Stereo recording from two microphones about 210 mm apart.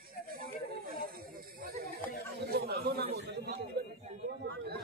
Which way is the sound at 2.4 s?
50° right (ahead or behind).